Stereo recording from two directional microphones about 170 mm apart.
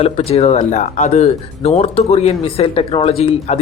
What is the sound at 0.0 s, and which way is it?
Speech, 35° left (ahead or behind).